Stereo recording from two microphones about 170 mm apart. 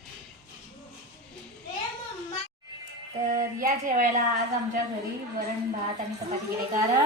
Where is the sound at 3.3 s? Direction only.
55° right (ahead or behind).